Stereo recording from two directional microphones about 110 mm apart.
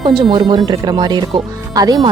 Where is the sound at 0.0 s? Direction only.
45° right (ahead or behind).